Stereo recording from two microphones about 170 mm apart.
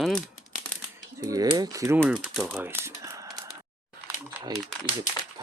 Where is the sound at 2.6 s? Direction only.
15° right (ahead or behind).